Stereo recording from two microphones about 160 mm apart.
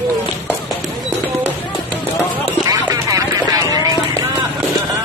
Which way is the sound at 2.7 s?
20° right (ahead or behind).